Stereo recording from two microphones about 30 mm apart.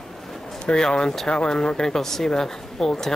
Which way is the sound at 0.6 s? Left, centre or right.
Left.